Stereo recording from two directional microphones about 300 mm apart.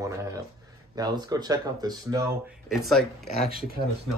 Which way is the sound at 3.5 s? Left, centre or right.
Right.